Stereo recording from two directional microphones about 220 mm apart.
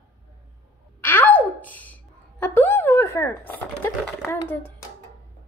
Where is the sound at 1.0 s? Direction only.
10° left (ahead or behind).